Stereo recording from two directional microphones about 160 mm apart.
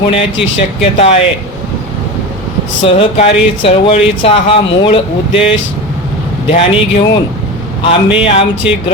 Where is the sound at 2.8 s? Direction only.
35° left (ahead or behind).